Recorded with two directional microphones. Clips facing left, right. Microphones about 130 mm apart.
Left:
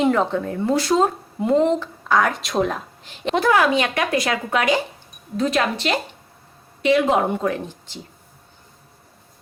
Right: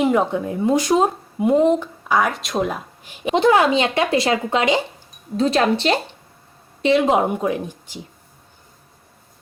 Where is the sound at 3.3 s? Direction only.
25° right (ahead or behind).